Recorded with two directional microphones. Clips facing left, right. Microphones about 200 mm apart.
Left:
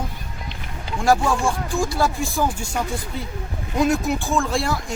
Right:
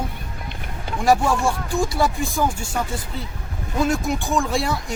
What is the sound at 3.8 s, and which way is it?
Speech, 10° left (ahead or behind).